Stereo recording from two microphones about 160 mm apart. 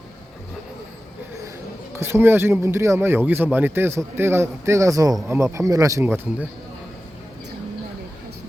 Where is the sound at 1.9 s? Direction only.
15° right (ahead or behind).